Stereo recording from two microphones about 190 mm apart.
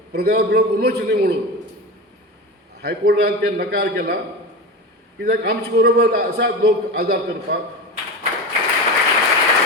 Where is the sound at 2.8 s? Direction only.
55° right (ahead or behind).